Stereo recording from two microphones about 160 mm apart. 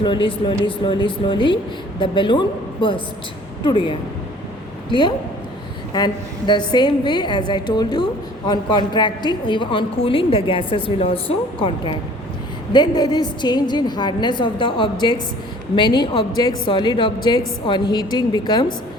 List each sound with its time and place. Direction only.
0.0 s a woman's voice: 30° left (ahead or behind)
3.6 s a woman's voice: 30° left (ahead or behind)